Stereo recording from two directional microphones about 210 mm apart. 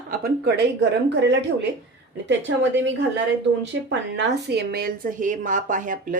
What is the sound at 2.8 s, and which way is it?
Speech, 60° right (ahead or behind).